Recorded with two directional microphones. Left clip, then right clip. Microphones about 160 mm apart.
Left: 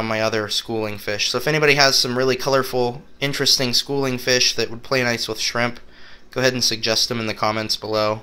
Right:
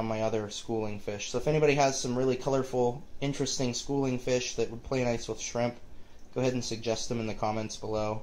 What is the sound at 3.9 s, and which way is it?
Speech, 15° left (ahead or behind).